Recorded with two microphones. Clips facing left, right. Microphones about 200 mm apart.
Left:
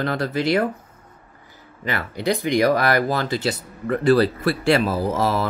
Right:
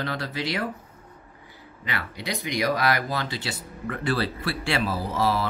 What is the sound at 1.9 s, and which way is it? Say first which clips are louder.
Speech: left 9 dB; 45° left (ahead or behind).